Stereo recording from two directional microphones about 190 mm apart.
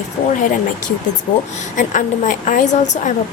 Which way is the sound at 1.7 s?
40° left (ahead or behind).